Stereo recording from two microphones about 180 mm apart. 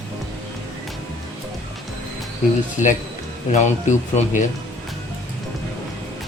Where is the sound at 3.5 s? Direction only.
45° left (ahead or behind).